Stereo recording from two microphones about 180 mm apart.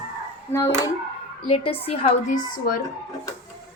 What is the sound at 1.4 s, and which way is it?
Speech, 30° left (ahead or behind).